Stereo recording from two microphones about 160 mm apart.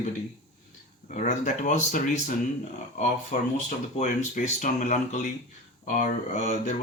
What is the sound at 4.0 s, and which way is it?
Speech, 50° left (ahead or behind).